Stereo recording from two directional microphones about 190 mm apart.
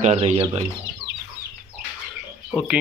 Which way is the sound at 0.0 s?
35° right (ahead or behind).